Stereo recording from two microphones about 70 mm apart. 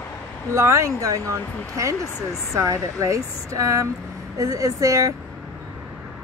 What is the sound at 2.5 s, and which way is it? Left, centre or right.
Speech, right.